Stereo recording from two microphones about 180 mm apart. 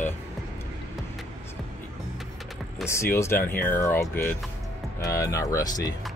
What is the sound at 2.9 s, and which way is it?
Speech, 15° left (ahead or behind).